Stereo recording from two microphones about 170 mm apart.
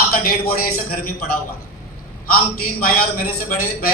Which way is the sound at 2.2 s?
60° left (ahead or behind).